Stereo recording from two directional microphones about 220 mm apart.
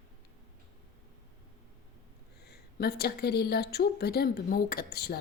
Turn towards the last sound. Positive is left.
turn(degrees=45)  # may be behind; listen again after turning